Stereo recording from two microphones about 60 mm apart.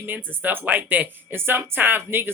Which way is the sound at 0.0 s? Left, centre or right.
Right.